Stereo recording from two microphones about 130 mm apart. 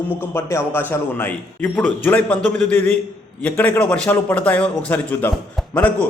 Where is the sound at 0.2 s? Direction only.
20° left (ahead or behind).